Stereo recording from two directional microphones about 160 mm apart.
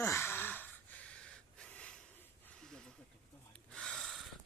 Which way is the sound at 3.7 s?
5° left (ahead or behind).